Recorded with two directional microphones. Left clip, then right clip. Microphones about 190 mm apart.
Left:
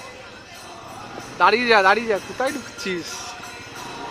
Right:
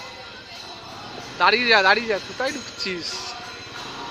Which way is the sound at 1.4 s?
15° left (ahead or behind).